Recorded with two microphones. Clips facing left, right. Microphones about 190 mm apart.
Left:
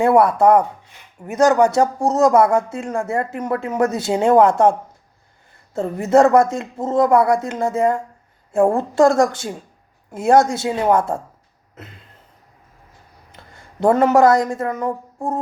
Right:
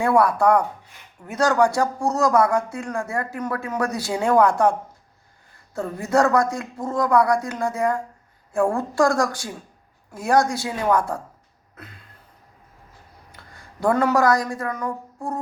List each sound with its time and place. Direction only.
0.0 s speech: 25° left (ahead or behind)
11.7 s a sound: 25° left (ahead or behind)
13.3 s speech: 25° left (ahead or behind)